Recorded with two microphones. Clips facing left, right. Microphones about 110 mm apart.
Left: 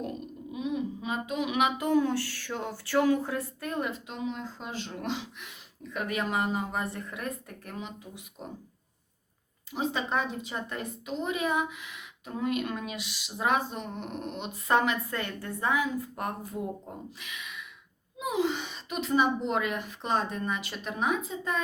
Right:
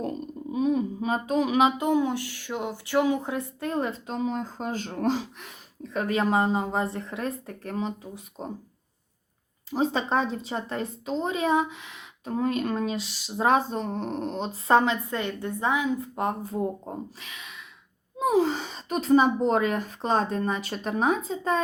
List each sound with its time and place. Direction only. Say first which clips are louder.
0.5 s a woman's voice: right 7 dB; 40° right (ahead or behind)
9.6 s a woman's voice: right 5 dB; 35° right (ahead or behind)